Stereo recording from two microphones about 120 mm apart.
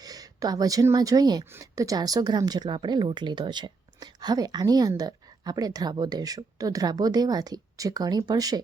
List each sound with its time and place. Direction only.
0.0 s speech: 30° right (ahead or behind)